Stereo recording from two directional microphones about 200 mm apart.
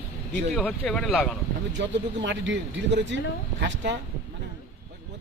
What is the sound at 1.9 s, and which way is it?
Speech, 65° right (ahead or behind).